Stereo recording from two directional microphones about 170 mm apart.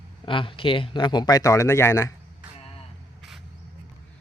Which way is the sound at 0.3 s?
30° left (ahead or behind).